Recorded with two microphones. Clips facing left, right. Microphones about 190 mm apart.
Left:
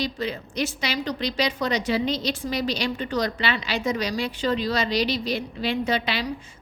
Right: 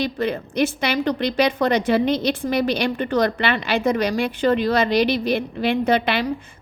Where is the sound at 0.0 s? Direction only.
55° right (ahead or behind).